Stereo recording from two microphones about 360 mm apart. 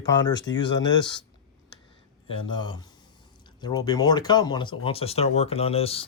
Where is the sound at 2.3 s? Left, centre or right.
Centre.